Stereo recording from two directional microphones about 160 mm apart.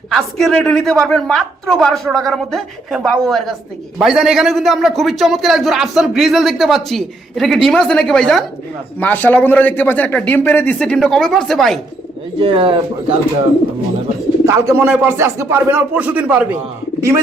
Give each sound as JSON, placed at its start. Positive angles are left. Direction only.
{"t": 0.1, "sound": "a man's voice", "side_deg": 0}
{"t": 12.4, "sound": "speech", "side_deg": -35}
{"t": 14.4, "sound": "speech", "side_deg": -20}